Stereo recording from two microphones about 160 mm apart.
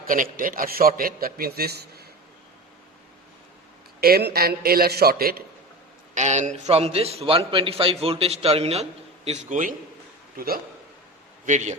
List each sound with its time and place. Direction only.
0.0 s a man's voice: 60° right (ahead or behind); by 2.0 s 85° right
4.0 s a man's voice: 75° right (ahead or behind)
6.1 s a man's voice: 45° right (ahead or behind)
10.3 s a man's voice: 70° right (ahead or behind)
11.4 s a man's voice: 45° right (ahead or behind)